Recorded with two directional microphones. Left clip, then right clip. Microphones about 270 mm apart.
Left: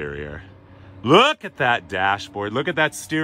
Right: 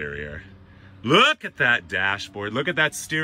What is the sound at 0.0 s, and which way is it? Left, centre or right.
Speech, centre.